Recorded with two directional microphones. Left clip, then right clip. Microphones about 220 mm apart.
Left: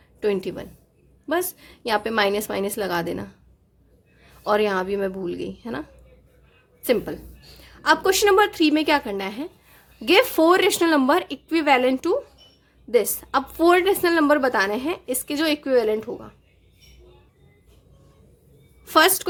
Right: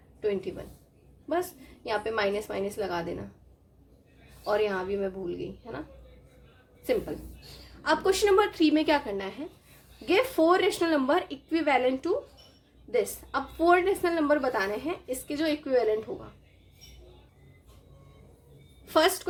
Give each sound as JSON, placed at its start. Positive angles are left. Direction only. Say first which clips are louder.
{"t": 0.2, "sound": "a woman's voice", "louder": "left 6 dB", "side_deg": 45}
{"t": 4.4, "sound": "speech", "louder": "left 6 dB", "side_deg": 45}
{"t": 7.9, "sound": "a woman's voice", "louder": "left 6 dB", "side_deg": 35}
{"t": 18.9, "sound": "a woman's voice", "louder": "left 7 dB", "side_deg": 35}